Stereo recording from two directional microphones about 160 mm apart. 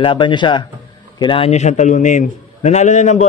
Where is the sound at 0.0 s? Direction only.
30° left (ahead or behind).